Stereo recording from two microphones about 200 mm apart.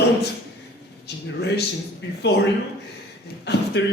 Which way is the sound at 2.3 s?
55° left (ahead or behind).